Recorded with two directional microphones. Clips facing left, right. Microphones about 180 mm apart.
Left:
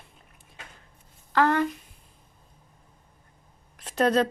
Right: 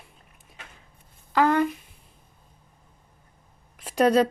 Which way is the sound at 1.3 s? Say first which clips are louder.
Right 2 dB; 10° right (ahead or behind).